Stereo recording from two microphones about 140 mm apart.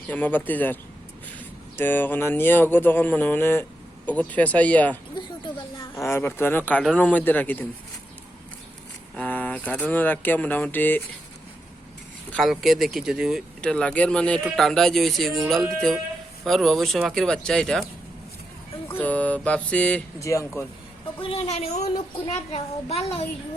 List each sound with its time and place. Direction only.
0.1 s speech: 10° left (ahead or behind)
5.1 s a sound: 35° left (ahead or behind)
6.0 s speech: 15° left (ahead or behind)
9.1 s speech: 10° left (ahead or behind)
12.3 s speech: centre (ahead or behind)
18.9 s speech: 10° left (ahead or behind)
20.1 s speech: 20° left (ahead or behind)
21.2 s speech: 45° left (ahead or behind)